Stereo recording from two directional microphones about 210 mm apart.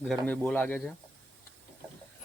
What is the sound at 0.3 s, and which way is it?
Speech, 5° left (ahead or behind).